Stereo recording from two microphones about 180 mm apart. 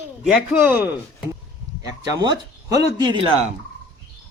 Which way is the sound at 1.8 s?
20° right (ahead or behind).